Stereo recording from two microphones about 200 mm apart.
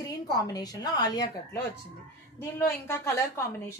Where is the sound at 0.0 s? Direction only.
20° left (ahead or behind).